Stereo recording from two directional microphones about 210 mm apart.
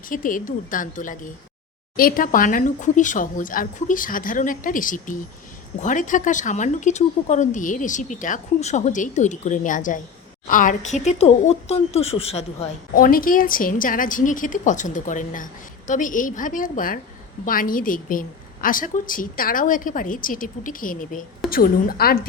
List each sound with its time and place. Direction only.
0.1 s speech: 40° left (ahead or behind)
12.9 s a woman's voice: 45° left (ahead or behind)